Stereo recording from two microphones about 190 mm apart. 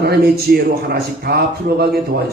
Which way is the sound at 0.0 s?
55° right (ahead or behind).